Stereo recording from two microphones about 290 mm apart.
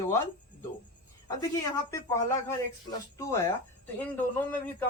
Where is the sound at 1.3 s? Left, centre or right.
Centre.